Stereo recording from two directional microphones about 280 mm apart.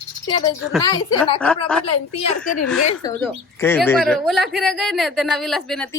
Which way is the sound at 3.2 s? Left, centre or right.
Centre.